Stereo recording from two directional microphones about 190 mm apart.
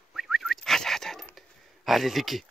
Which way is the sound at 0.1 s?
Centre (ahead or behind).